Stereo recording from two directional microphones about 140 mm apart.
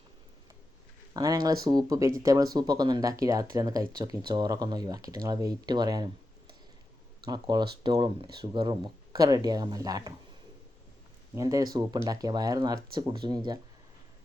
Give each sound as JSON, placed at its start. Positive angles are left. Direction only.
{"t": 1.1, "sound": "speech", "side_deg": -25}
{"t": 7.3, "sound": "speech", "side_deg": -30}
{"t": 11.3, "sound": "speech", "side_deg": -25}